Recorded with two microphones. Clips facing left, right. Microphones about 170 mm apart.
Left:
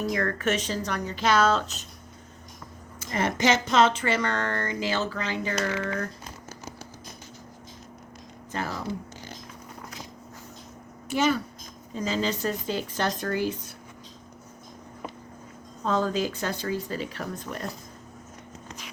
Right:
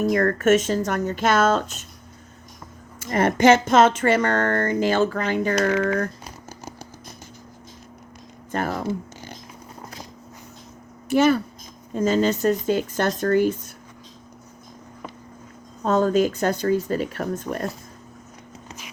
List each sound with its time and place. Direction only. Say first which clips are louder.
0.0 s speech: right 7 dB; 45° right (ahead or behind)
3.1 s speech: right 8 dB; 50° right (ahead or behind)
8.5 s speech: right 6 dB; 50° right (ahead or behind)
11.1 s speech: right 7 dB; 55° right (ahead or behind)
15.8 s speech: right 7 dB; 50° right (ahead or behind)